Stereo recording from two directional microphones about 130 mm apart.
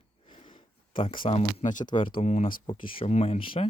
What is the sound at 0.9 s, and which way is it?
Speech, 40° left (ahead or behind).